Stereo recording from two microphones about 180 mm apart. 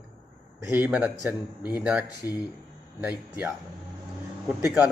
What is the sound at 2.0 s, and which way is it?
Speech, 20° left (ahead or behind).